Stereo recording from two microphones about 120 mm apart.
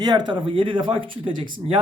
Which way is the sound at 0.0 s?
35° right (ahead or behind).